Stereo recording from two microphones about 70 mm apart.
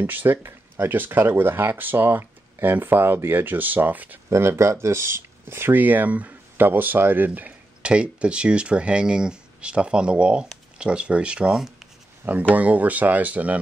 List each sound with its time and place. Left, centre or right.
0.0 s speech: right
4.3 s speech: right; by 11.5 s centre
11.5 s speech: centre
12.5 s speech: right